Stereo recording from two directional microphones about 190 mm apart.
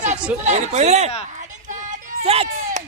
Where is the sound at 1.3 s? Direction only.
40° right (ahead or behind).